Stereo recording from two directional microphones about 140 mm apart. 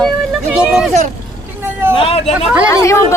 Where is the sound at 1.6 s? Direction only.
15° right (ahead or behind).